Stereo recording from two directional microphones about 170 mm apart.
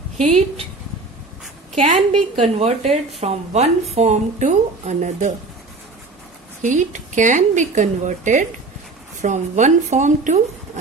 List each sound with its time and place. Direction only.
0.2 s speech: 40° right (ahead or behind)
1.7 s speech: 45° right (ahead or behind)
6.6 s speech: 45° right (ahead or behind)